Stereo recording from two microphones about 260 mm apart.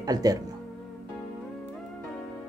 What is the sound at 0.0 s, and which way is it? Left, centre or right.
Speech, centre.